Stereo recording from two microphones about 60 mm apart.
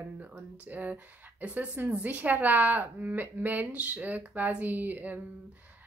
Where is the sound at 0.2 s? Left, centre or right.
Right.